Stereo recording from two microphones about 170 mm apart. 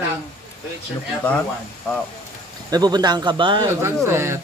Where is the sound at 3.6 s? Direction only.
15° right (ahead or behind).